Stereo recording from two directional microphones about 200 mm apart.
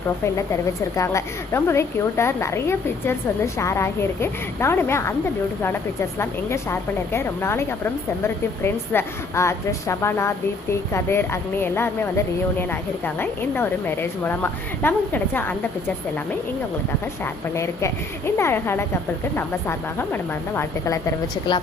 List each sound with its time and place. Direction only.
0.9 s a woman's voice: 15° left (ahead or behind)
6.1 s a woman's voice: 15° left (ahead or behind)
13.1 s a woman's voice: 10° left (ahead or behind)
17.5 s a woman's voice: 15° left (ahead or behind)